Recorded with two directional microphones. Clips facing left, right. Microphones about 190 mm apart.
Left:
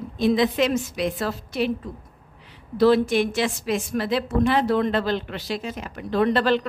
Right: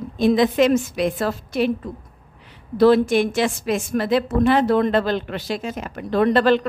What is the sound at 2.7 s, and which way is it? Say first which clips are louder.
A woman's voice: right 3 dB; 50° right (ahead or behind).